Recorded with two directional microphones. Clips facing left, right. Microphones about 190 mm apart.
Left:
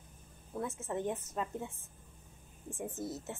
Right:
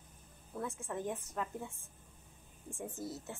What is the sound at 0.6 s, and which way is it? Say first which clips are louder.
A woman's voice: left 3 dB; 20° left (ahead or behind).